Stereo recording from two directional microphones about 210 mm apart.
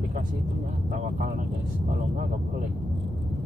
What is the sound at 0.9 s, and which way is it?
Speech, 40° right (ahead or behind).